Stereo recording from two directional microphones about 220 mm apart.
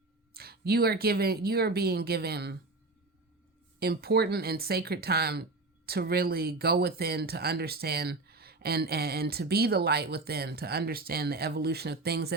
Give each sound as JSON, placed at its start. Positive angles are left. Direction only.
{"t": 0.3, "sound": "speech", "side_deg": -45}
{"t": 3.8, "sound": "speech", "side_deg": -45}